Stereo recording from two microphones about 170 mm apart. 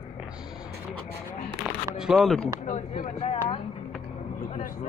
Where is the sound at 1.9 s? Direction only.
Centre (ahead or behind).